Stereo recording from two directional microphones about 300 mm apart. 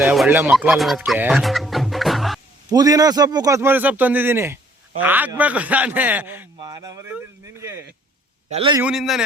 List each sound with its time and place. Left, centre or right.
0.0 s speech: centre
2.7 s a man's voice: centre
8.4 s a man's voice: centre
8.8 s a man's voice: centre